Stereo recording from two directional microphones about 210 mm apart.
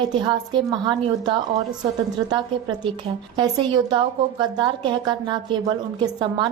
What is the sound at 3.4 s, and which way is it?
A woman's voice, 20° right (ahead or behind).